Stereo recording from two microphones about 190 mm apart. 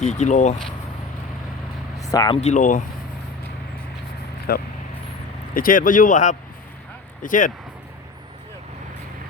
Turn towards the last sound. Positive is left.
turn(degrees=45)  # may be behind; listen again after turning